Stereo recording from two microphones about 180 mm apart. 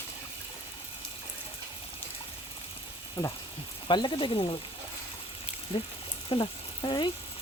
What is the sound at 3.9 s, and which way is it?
Speech, 25° left (ahead or behind).